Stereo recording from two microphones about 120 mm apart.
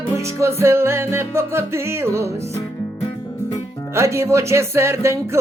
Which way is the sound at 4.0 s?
25° right (ahead or behind).